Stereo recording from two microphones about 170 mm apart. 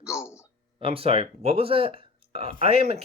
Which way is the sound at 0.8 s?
35° right (ahead or behind).